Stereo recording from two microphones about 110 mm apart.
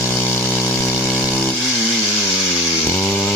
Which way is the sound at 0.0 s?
20° left (ahead or behind).